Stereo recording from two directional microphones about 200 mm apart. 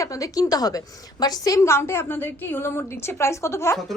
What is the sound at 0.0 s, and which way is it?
A woman's voice, 15° left (ahead or behind).